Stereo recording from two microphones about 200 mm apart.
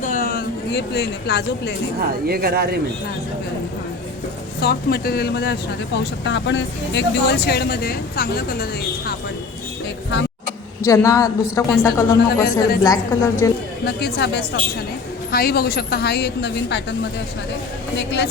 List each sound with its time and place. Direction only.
0.0 s a sound: 40° left (ahead or behind)
2.0 s speech: 50° right (ahead or behind)
4.6 s speech: 50° left (ahead or behind)
10.8 s a woman's voice: 15° left (ahead or behind)
12.5 s speech: 50° left (ahead or behind)
12.8 s a woman's voice: 15° left (ahead or behind)
13.8 s a woman's voice: 55° left (ahead or behind)
17.9 s a woman's voice: 60° left (ahead or behind)